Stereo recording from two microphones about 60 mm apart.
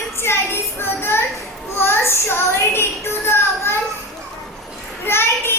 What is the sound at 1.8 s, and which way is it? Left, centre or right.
Child singing, left.